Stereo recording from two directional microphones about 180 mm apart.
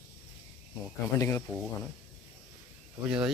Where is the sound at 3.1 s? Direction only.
5° right (ahead or behind).